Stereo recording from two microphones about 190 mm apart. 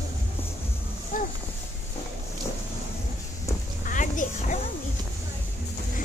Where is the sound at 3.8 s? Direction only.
45° left (ahead or behind).